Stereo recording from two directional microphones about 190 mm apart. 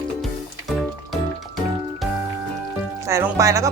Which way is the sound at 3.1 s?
15° right (ahead or behind).